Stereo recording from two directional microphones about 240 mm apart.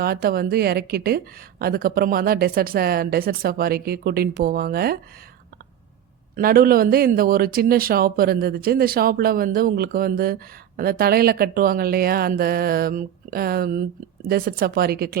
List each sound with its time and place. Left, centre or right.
0.0 s a woman's voice: right
6.3 s a woman's voice: right